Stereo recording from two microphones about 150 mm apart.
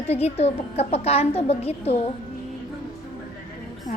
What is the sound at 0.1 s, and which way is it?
A woman's voice, 45° left (ahead or behind).